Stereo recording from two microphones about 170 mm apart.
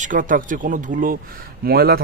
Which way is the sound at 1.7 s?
65° right (ahead or behind).